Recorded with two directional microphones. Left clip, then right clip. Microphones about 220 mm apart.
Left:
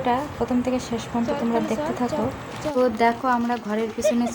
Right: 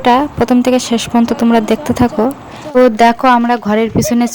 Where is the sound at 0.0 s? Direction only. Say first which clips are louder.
Right 13 dB; 45° right (ahead or behind).